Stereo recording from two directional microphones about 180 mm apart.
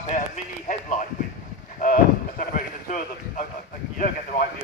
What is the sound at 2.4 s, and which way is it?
Speech, 50° left (ahead or behind).